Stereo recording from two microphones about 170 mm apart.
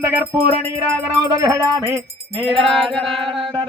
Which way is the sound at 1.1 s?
20° right (ahead or behind).